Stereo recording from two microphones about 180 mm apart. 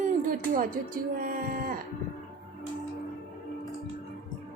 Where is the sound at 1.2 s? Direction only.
50° right (ahead or behind).